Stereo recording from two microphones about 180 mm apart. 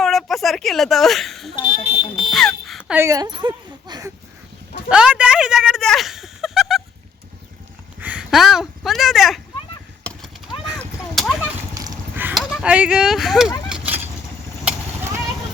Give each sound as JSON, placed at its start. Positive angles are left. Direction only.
{"t": 0.0, "sound": "speech", "side_deg": 0}
{"t": 1.6, "sound": "a sound", "side_deg": -40}
{"t": 2.3, "sound": "smoke detector", "side_deg": 0}
{"t": 3.0, "sound": "speech", "side_deg": -20}
{"t": 4.9, "sound": "speech", "side_deg": -5}
{"t": 8.0, "sound": "speech", "side_deg": -5}
{"t": 10.0, "sound": "horse", "side_deg": 5}
{"t": 10.8, "sound": "a sound", "side_deg": 0}
{"t": 11.7, "sound": "a sound", "side_deg": -20}
{"t": 12.4, "sound": "speech", "side_deg": 0}
{"t": 13.7, "sound": "a sound", "side_deg": -5}
{"t": 14.6, "sound": "vehicle", "side_deg": -10}